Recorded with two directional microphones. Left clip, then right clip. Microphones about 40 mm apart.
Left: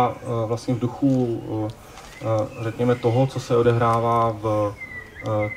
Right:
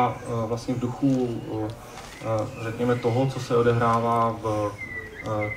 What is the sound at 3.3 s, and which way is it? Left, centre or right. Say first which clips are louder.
Speech: left 3 dB; left.